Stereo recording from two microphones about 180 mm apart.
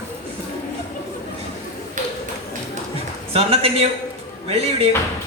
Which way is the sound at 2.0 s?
45° right (ahead or behind).